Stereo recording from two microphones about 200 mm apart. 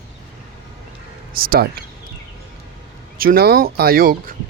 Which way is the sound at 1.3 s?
50° right (ahead or behind).